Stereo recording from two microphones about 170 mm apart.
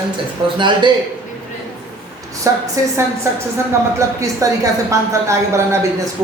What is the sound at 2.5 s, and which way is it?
Speech, 15° right (ahead or behind).